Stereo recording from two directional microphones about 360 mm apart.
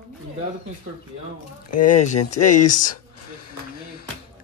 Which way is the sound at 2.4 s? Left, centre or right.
Left.